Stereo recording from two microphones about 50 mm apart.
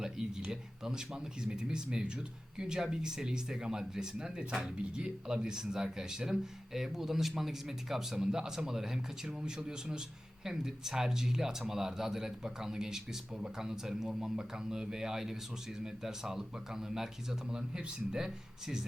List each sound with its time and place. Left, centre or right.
0.0 s speech: centre